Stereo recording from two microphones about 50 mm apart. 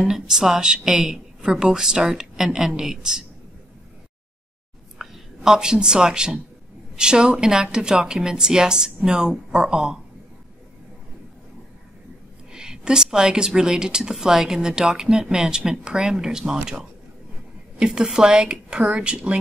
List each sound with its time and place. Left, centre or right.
0.0 s a woman's voice: centre
4.9 s a woman's voice: centre
12.5 s a woman's voice: centre